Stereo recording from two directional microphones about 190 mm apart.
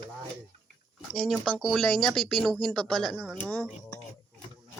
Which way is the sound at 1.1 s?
Centre (ahead or behind).